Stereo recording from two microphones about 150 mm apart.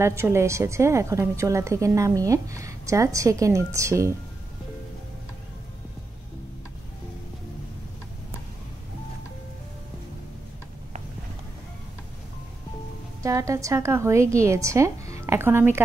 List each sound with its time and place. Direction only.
0.0 s a woman's voice: 15° right (ahead or behind)
13.2 s a woman's voice: 20° right (ahead or behind)